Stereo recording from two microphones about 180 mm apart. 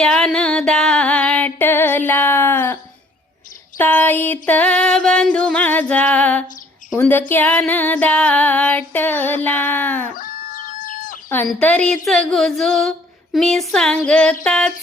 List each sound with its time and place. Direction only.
0.0 s female singing: centre (ahead or behind)
3.8 s female singing: 10° left (ahead or behind)
10.2 s chicken: 50° left (ahead or behind)
11.4 s a sound: 5° left (ahead or behind)